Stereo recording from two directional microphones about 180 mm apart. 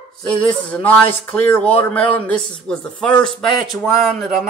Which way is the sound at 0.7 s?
5° left (ahead or behind).